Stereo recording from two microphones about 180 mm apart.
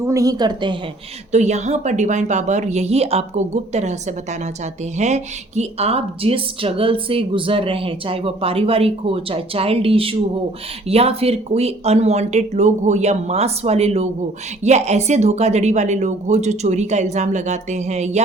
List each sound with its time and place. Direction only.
0.0 s a woman's voice: 15° right (ahead or behind)
1.3 s speech: 40° right (ahead or behind)
4.9 s speech: 40° right (ahead or behind)